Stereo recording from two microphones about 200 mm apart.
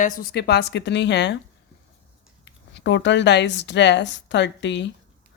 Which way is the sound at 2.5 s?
65° left (ahead or behind).